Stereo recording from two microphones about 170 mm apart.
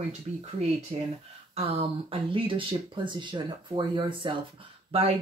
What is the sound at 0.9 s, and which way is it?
Speech, 40° right (ahead or behind).